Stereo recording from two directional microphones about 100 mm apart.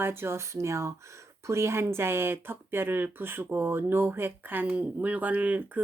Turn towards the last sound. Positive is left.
turn(degrees=-15)  # may be behind; listen again after turning